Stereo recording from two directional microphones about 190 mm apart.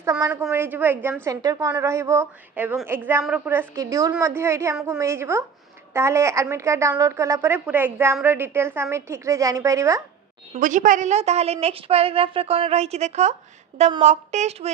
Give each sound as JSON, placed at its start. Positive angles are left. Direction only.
{"t": 0.0, "sound": "a woman's voice", "side_deg": -15}
{"t": 10.5, "sound": "a woman's voice", "side_deg": -40}